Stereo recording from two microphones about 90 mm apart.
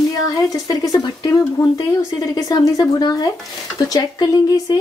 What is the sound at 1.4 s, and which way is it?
Speech, 35° left (ahead or behind).